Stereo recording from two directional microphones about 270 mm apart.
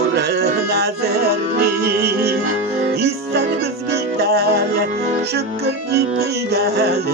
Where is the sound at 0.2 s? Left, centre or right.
Right.